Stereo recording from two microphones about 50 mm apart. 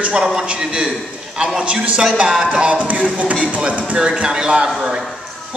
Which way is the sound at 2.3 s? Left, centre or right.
Centre.